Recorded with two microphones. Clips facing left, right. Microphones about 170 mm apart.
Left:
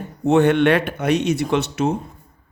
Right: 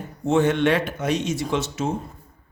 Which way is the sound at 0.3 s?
65° left (ahead or behind).